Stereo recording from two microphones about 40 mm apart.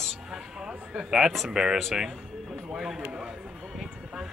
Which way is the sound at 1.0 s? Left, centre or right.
Centre.